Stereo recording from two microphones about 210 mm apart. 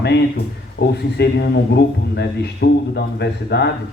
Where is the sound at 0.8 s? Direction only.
50° left (ahead or behind).